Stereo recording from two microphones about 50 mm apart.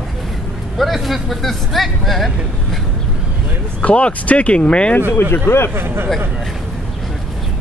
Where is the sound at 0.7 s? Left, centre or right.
Centre.